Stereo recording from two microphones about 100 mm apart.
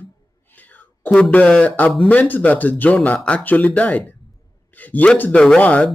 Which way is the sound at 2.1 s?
15° left (ahead or behind).